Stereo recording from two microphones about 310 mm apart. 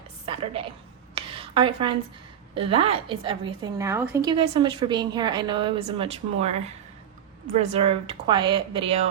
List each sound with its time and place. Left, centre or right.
0.3 s a woman's voice: centre
1.1 s a sound: centre
2.6 s a woman's voice: centre